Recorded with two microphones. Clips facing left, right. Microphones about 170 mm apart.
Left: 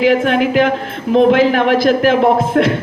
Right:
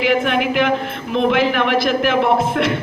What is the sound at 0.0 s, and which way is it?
A woman's voice, 40° left (ahead or behind).